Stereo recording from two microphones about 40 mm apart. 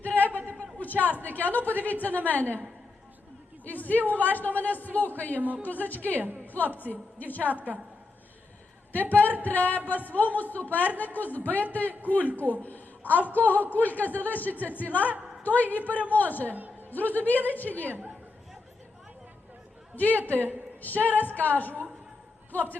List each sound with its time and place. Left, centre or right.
0.0 s a sound: left
1.2 s a man's voice: left
3.6 s a man's voice: left
6.1 s a woman's voice: right
6.4 s a sound: left
6.7 s a man's voice: left
8.9 s a man's voice: left
20.0 s a man's voice: left
20.5 s a sound: left
21.1 s a man's voice: left